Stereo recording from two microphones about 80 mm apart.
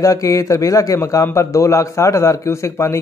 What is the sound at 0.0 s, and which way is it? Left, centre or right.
A man's voice, left.